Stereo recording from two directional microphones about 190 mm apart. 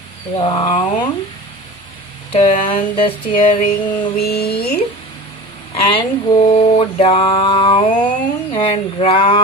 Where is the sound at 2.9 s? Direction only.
30° left (ahead or behind).